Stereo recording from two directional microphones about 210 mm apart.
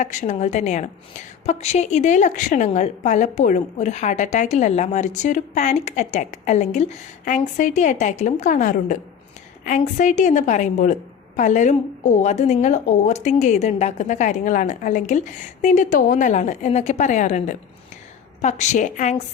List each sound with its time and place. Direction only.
0.0 s speech: 35° left (ahead or behind)